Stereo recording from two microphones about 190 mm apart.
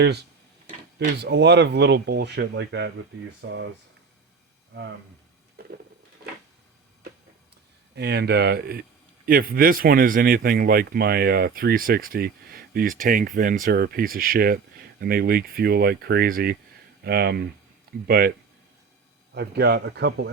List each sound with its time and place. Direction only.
0.9 s speech: 60° right (ahead or behind)
5.6 s a sound: 50° right (ahead or behind)
7.9 s speech: 60° right (ahead or behind)